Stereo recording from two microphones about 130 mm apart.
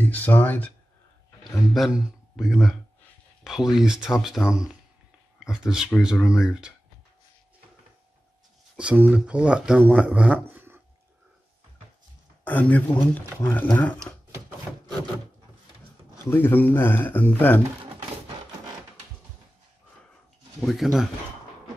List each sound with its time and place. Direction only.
0.0 s speech: 10° left (ahead or behind)
1.7 s a man's voice: 5° right (ahead or behind)
8.7 s speech: 10° right (ahead or behind)
12.4 s speech: 10° left (ahead or behind)
16.3 s speech: 15° left (ahead or behind)
20.6 s a man's voice: centre (ahead or behind)